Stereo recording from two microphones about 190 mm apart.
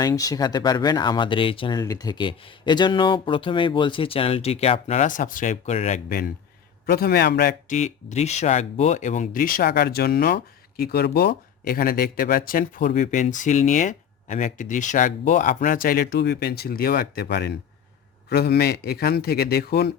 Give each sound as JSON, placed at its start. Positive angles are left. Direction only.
{"t": 0.0, "sound": "speech", "side_deg": 20}